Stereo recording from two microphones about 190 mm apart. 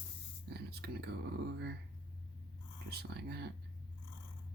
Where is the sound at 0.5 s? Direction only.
60° right (ahead or behind).